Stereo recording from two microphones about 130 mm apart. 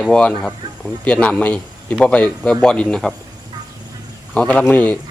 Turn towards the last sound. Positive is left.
turn(degrees=10)  # may be behind; listen again after turning